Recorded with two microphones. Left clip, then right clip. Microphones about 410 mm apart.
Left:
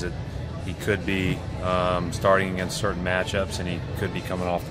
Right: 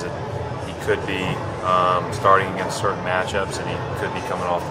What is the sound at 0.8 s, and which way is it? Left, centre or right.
Speech, left.